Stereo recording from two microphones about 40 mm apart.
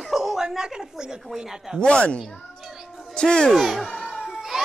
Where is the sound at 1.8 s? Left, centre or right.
Left.